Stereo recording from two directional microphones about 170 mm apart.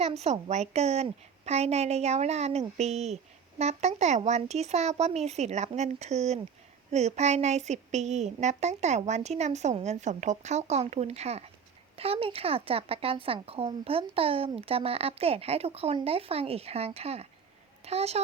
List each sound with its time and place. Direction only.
0.0 s speech: 40° right (ahead or behind)